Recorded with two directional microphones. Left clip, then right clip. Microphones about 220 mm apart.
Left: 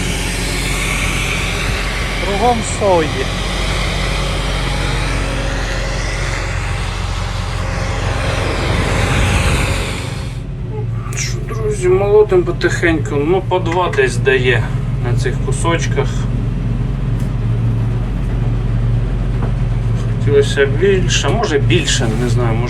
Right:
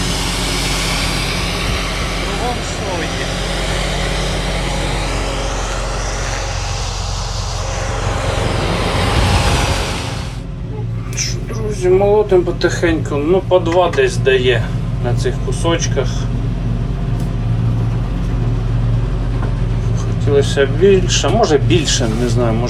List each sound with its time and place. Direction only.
0.0 s vehicle: 15° right (ahead or behind)
1.2 s vehicle: 40° right (ahead or behind)
8.2 s vehicle: 45° right (ahead or behind); by 9.8 s 25° right (ahead or behind)
11.7 s speech: 10° right (ahead or behind)
20.3 s speech: 15° right (ahead or behind)